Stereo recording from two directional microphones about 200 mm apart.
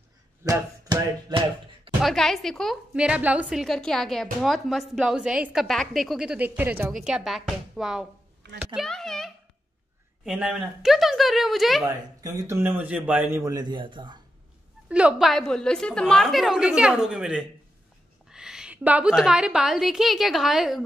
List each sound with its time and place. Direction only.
0.4 s a sound: 15° right (ahead or behind)
2.0 s a child's voice: centre (ahead or behind)
11.8 s a man's voice: 15° right (ahead or behind)
14.9 s a woman's voice: 5° right (ahead or behind)